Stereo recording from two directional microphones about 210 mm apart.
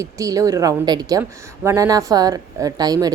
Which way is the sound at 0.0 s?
15° right (ahead or behind).